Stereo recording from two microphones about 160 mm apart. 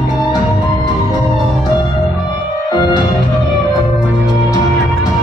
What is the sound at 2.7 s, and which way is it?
Music, 25° left (ahead or behind).